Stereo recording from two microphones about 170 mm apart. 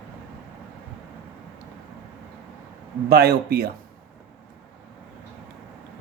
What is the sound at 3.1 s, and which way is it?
Speech, 65° right (ahead or behind).